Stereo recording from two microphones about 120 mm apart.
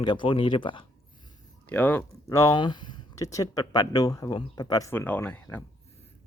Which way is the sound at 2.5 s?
40° left (ahead or behind).